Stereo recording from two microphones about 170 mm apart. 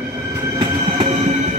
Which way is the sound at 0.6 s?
30° right (ahead or behind).